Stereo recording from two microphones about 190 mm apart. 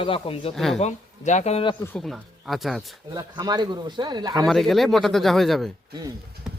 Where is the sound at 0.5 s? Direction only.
Centre (ahead or behind).